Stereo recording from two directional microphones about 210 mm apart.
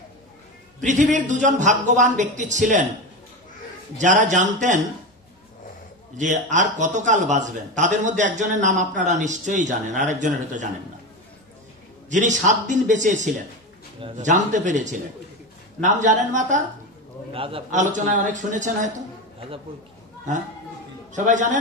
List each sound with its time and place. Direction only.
0.8 s a man's voice: 35° right (ahead or behind)
4.0 s a man's voice: 35° right (ahead or behind)
6.1 s a man's voice: 35° right (ahead or behind)
12.1 s a man's voice: 35° right (ahead or behind)
17.3 s a man's voice: 25° right (ahead or behind)
21.1 s a man's voice: 35° right (ahead or behind)